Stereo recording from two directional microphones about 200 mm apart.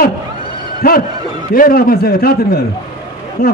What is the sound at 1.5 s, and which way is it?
A man's voice, 45° left (ahead or behind).